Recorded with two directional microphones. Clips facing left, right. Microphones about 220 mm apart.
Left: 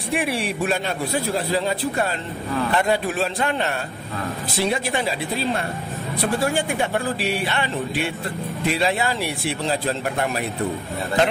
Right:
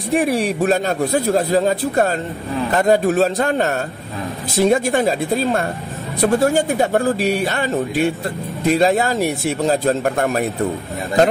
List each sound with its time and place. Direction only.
0.1 s a man's voice: 45° right (ahead or behind)